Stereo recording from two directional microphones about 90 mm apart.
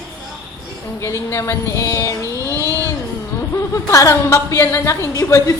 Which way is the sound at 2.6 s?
35° left (ahead or behind).